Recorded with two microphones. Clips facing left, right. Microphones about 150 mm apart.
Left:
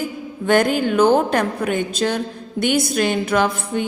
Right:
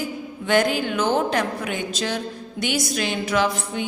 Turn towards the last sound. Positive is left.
turn(degrees=50)  # may be behind; listen again after turning